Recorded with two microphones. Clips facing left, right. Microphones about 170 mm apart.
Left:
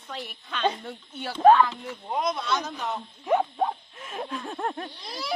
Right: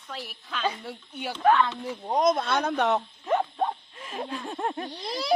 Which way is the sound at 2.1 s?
45° right (ahead or behind).